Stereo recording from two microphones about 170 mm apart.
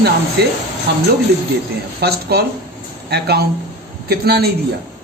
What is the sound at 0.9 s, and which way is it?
Speech, 75° right (ahead or behind).